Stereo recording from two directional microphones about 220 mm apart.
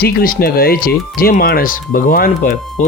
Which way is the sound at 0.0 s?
40° left (ahead or behind).